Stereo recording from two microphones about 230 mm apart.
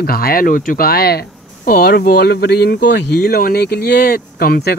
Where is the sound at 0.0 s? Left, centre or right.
Left.